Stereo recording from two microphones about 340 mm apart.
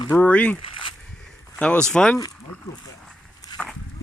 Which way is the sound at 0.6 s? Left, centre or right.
Centre.